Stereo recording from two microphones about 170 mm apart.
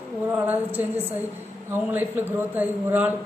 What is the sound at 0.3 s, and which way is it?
A man's voice, 10° right (ahead or behind).